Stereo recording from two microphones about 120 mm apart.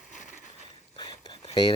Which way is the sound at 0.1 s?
90° left.